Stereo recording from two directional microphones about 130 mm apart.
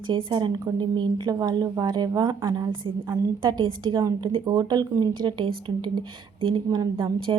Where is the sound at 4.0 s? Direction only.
25° right (ahead or behind).